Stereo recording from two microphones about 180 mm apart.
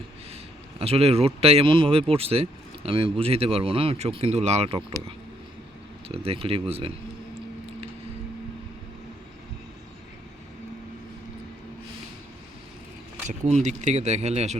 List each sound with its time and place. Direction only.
0.8 s speech: 35° right (ahead or behind)
13.2 s speech: 40° right (ahead or behind)